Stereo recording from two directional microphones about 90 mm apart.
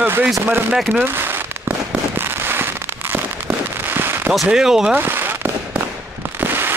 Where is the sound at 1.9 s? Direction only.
25° right (ahead or behind).